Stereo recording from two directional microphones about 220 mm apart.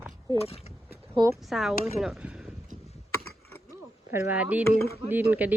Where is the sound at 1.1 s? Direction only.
15° right (ahead or behind).